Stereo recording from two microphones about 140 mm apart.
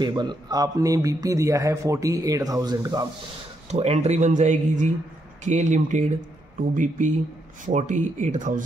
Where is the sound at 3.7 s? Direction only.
50° right (ahead or behind); by 8.6 s 65° right (ahead or behind).